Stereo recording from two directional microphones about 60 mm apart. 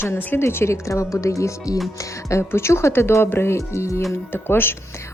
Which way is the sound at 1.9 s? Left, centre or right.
Left.